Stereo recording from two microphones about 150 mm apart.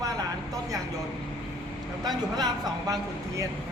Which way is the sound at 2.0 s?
25° right (ahead or behind).